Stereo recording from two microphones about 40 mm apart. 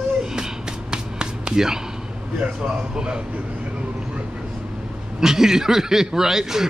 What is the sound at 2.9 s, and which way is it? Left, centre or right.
Speech, right.